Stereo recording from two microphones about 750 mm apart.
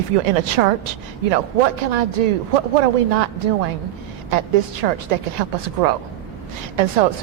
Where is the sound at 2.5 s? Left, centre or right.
Right.